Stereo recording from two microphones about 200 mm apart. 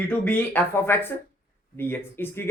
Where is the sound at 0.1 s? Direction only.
10° left (ahead or behind).